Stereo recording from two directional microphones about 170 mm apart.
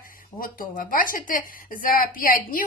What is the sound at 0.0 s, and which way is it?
A woman's voice, 55° left (ahead or behind).